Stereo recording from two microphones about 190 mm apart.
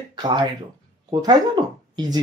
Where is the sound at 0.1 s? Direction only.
25° right (ahead or behind).